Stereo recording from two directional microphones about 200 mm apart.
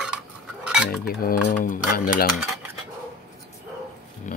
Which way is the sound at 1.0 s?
45° left (ahead or behind).